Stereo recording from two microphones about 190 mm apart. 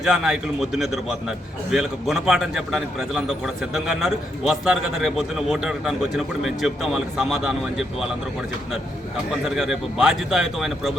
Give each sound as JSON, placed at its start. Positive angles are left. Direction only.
{"t": 0.0, "sound": "a man's voice", "side_deg": -5}
{"t": 9.3, "sound": "a man's voice", "side_deg": 0}